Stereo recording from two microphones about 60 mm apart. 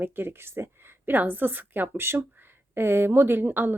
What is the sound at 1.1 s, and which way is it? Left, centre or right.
A woman's voice, right.